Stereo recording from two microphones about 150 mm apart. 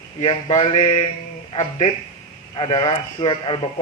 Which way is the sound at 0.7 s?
40° left (ahead or behind).